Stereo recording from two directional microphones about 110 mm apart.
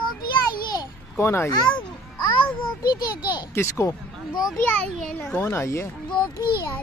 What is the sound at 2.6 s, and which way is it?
Speech, 40° left (ahead or behind).